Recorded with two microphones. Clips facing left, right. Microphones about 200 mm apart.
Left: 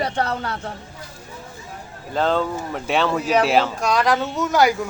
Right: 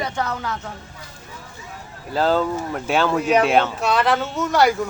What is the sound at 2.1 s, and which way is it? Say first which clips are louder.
A man's voice: right 1 dB; 5° right (ahead or behind).